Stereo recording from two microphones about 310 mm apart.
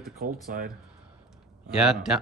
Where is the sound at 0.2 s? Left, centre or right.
Right.